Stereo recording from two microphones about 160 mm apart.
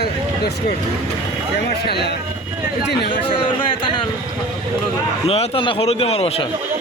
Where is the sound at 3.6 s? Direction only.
30° left (ahead or behind).